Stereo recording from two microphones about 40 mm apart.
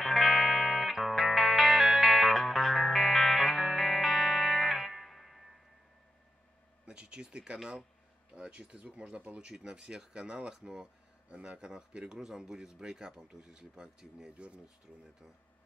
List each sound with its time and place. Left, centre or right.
0.0 s music: centre
6.9 s a sound: right
7.5 s speech: centre
11.2 s speech: right
11.6 s speech: centre